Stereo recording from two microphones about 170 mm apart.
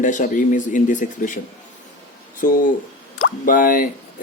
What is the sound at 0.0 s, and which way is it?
Speech, 50° left (ahead or behind).